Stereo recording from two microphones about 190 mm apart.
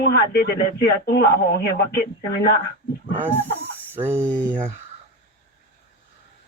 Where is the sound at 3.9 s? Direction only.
10° right (ahead or behind).